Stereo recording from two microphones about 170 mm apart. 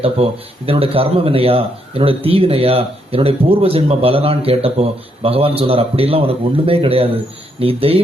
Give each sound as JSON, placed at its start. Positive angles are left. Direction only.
{"t": 0.0, "sound": "speech", "side_deg": -35}